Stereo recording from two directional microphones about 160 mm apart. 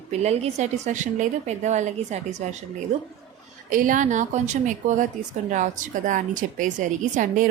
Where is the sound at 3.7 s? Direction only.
55° right (ahead or behind).